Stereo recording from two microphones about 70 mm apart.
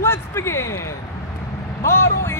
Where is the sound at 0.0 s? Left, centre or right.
Left.